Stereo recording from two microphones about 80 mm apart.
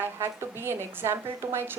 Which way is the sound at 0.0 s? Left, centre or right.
Right.